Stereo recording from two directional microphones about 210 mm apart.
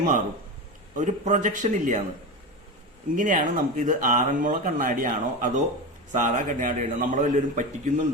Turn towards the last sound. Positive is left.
turn(degrees=-35)  # may be behind; listen again after turning